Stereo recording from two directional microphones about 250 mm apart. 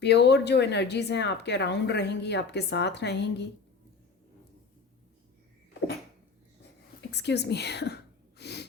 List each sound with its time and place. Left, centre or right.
0.0 s a woman's voice: left
7.1 s speech: left
8.4 s sneeze: left